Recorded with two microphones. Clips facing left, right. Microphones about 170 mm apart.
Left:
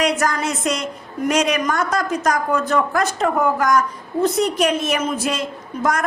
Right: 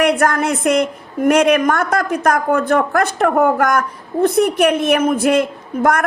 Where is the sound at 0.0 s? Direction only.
60° right (ahead or behind).